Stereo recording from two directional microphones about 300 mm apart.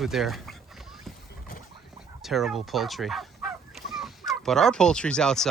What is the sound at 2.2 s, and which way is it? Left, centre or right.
Speech, centre.